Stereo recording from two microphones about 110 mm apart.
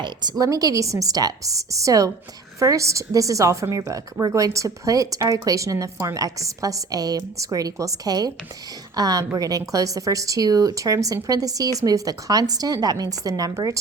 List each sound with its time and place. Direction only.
0.0 s speech: 40° right (ahead or behind)